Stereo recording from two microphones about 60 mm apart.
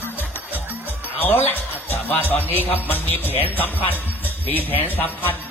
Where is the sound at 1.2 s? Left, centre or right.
Left.